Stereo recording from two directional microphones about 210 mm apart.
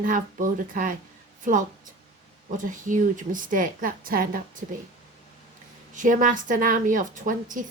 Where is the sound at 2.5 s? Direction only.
40° right (ahead or behind).